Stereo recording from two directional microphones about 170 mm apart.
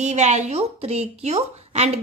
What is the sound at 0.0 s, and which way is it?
A woman's voice, 45° right (ahead or behind).